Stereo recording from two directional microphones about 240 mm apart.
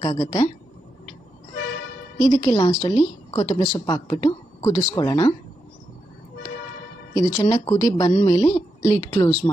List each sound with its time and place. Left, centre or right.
0.0 s a woman's voice: centre
2.1 s a woman's voice: centre
7.2 s a woman's voice: centre